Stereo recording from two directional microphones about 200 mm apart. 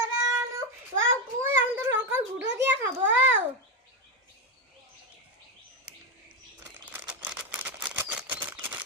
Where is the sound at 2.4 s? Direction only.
60° right (ahead or behind).